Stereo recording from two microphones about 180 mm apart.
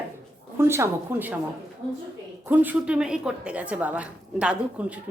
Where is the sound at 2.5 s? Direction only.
10° right (ahead or behind).